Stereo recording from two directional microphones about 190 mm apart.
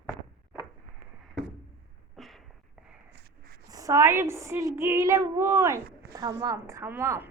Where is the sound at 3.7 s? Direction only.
20° right (ahead or behind).